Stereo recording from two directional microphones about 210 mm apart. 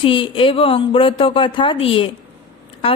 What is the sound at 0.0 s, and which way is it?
Speech, 25° left (ahead or behind).